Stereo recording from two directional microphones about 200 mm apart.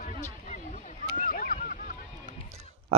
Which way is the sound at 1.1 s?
40° left (ahead or behind).